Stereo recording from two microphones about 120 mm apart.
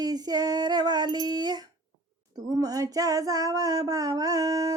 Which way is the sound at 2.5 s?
30° right (ahead or behind).